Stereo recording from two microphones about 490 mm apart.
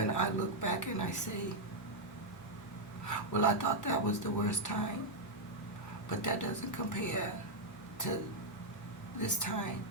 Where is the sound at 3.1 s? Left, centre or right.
Left.